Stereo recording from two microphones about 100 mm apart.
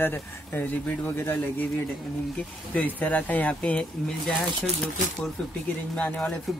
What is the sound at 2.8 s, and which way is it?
Speech, 15° left (ahead or behind).